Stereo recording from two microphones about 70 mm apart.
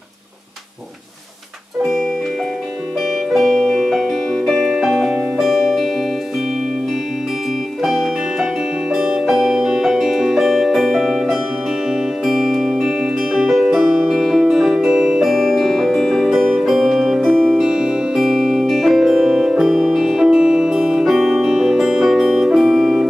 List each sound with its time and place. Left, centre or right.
3.3 s music: centre
7.8 s music: centre